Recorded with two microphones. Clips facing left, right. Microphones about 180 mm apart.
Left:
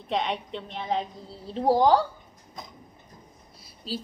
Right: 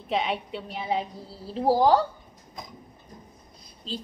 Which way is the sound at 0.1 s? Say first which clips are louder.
Right 1 dB; 5° right (ahead or behind).